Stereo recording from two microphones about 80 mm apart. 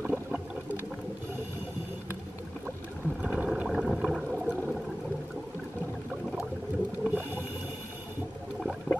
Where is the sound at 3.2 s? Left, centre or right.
Centre.